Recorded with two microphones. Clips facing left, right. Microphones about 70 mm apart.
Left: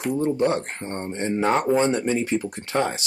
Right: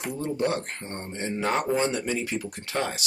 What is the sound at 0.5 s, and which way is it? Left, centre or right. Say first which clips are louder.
Speech: left 4 dB; left.